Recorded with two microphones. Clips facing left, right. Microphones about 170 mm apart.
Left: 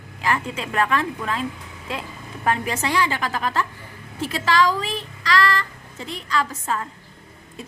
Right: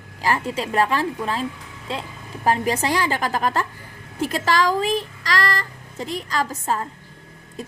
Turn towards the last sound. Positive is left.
turn(degrees=-40)  # may be behind; listen again after turning